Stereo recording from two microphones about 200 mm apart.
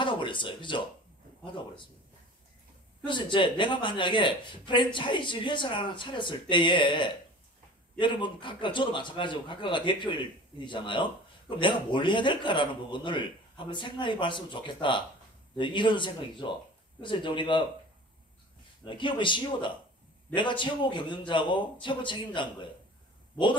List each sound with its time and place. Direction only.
0.0 s speech: 25° left (ahead or behind)
3.1 s a man's voice: 25° left (ahead or behind)
18.9 s a man's voice: 25° left (ahead or behind)